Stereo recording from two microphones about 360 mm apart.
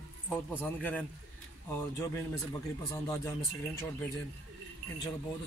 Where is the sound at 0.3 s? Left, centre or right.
Centre.